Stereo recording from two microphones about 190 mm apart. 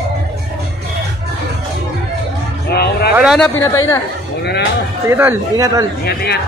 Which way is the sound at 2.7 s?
55° left (ahead or behind).